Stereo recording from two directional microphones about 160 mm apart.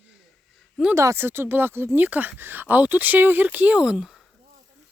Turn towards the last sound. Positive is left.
turn(degrees=-5)  # may be behind; listen again after turning